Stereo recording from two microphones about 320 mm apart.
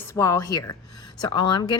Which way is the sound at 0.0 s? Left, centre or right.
Centre.